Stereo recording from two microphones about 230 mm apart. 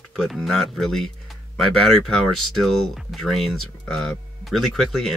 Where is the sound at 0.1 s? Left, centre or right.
Centre.